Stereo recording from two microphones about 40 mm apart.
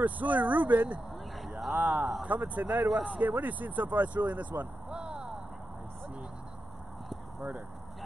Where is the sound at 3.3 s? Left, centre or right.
Right.